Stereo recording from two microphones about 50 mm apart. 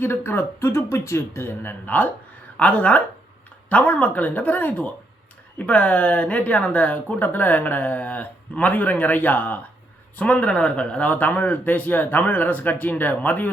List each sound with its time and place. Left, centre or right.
0.0 s speech: left
2.6 s a man's voice: left